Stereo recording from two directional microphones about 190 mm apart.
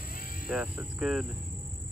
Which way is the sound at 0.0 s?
50° left (ahead or behind).